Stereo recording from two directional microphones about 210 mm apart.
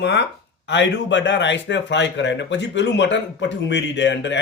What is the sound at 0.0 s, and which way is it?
A man's voice, 55° left (ahead or behind).